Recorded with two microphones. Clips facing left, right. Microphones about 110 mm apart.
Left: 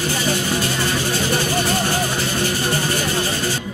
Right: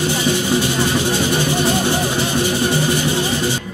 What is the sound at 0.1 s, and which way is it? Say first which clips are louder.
Vehicle: right 4 dB; 15° right (ahead or behind).